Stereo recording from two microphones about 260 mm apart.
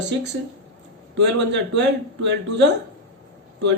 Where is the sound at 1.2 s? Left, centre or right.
Right.